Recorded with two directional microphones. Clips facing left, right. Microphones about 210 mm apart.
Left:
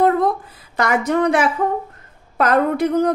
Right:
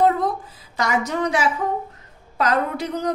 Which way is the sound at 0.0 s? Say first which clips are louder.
Left 3 dB; 60° left (ahead or behind).